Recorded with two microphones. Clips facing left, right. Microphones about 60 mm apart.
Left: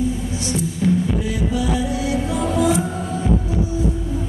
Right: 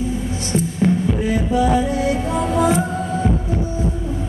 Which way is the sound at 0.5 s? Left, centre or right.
Right.